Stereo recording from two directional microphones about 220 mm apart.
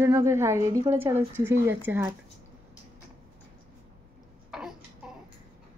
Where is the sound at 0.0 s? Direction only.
10° right (ahead or behind).